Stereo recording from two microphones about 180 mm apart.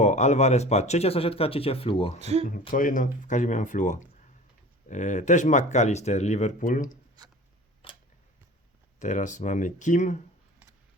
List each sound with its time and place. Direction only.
0.0 s speech: 40° left (ahead or behind)
2.1 s speech: 35° right (ahead or behind)
2.7 s speech: 45° left (ahead or behind)
7.8 s camera: 30° left (ahead or behind)
9.0 s speech: 45° left (ahead or behind)